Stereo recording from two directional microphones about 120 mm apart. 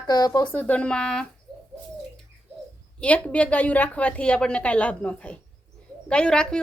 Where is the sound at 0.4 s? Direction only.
10° left (ahead or behind).